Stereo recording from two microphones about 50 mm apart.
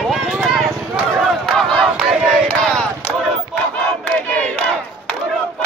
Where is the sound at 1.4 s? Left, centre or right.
Centre.